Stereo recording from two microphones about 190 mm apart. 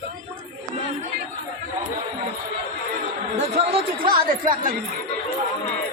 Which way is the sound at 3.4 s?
35° right (ahead or behind).